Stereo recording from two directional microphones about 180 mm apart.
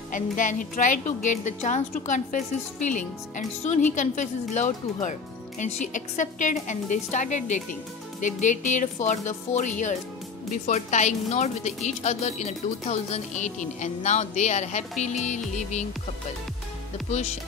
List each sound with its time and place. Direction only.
0.1 s a woman's voice: 45° left (ahead or behind)